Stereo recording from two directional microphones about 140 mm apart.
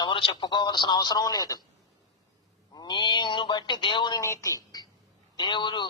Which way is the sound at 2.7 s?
30° left (ahead or behind).